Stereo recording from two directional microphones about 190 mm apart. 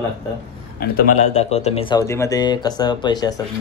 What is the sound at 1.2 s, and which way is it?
Speech, 35° left (ahead or behind).